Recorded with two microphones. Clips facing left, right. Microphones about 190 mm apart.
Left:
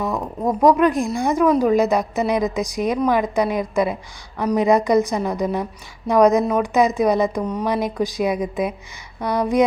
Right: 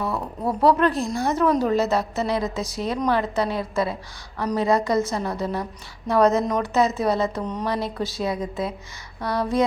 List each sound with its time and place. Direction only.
0.0 s speech: 15° left (ahead or behind)